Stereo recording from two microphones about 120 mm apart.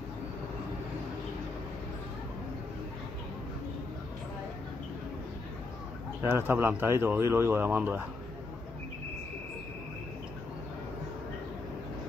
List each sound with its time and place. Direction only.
6.2 s speech: 20° right (ahead or behind)